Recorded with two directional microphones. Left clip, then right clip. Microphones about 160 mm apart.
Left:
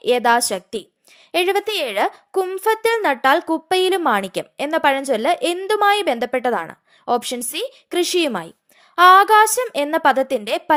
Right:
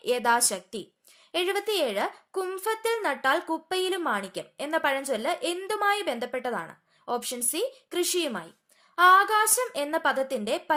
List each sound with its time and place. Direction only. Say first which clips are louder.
0.0 s a woman's voice: left 8 dB; 40° left (ahead or behind)